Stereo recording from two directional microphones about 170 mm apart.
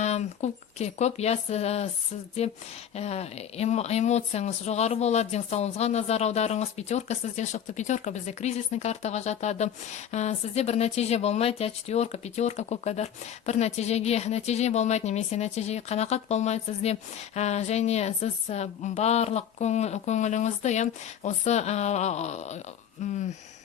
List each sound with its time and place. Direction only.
0.0 s speech: 40° left (ahead or behind)